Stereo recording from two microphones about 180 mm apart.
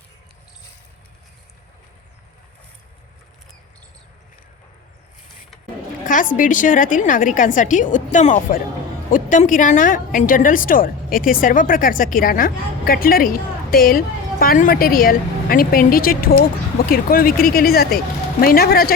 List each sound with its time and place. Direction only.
6.3 s a woman's voice: 45° left (ahead or behind)